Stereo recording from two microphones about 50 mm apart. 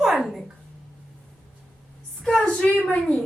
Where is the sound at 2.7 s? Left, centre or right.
Left.